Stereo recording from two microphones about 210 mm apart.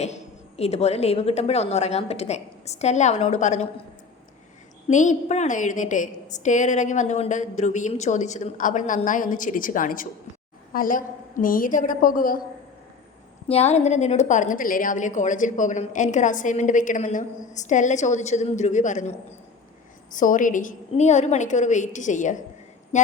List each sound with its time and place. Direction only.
0.0 s a woman's voice: 30° left (ahead or behind)
4.9 s a woman's voice: 35° left (ahead or behind)
13.5 s a woman's voice: 30° left (ahead or behind)
20.1 s a woman's voice: 40° left (ahead or behind)